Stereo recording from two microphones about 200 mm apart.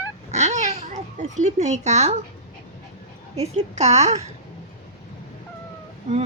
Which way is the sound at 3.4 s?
35° right (ahead or behind).